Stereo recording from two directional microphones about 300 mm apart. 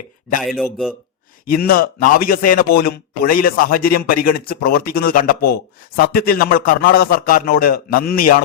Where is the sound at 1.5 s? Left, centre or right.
Left.